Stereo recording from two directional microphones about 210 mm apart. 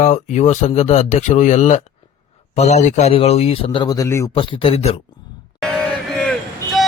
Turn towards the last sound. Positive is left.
turn(degrees=0)  # may be behind; listen again after turning